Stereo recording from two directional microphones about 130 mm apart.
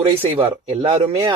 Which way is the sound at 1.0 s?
30° right (ahead or behind).